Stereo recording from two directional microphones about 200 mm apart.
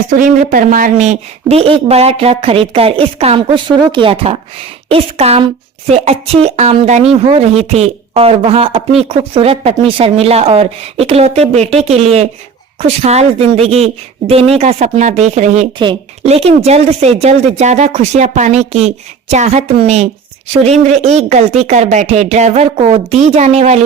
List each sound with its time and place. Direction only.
0.2 s speech: 40° right (ahead or behind)